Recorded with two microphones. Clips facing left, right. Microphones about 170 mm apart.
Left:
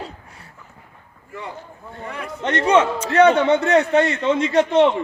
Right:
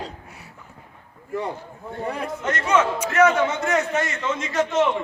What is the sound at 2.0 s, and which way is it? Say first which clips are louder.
Speech: right 3 dB; 35° right (ahead or behind).